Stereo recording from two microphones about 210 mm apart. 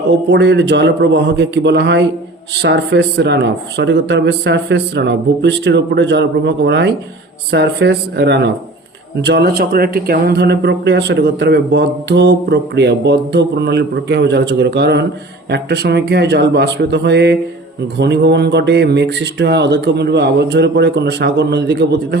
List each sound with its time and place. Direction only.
0.3 s a man's voice: 55° right (ahead or behind)